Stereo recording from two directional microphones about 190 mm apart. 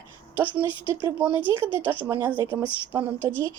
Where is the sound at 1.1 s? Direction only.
10° right (ahead or behind).